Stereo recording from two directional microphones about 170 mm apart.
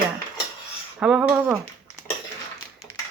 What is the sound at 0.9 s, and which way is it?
Speech, 5° right (ahead or behind).